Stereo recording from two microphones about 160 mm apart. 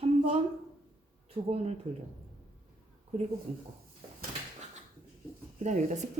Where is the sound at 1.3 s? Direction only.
40° right (ahead or behind).